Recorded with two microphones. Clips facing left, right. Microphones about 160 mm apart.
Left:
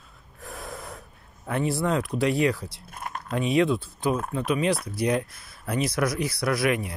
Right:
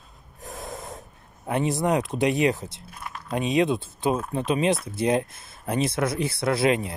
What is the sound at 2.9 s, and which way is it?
Biting, 50° left (ahead or behind).